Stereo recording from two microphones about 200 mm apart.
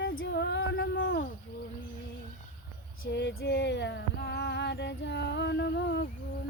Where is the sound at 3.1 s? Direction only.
60° left (ahead or behind).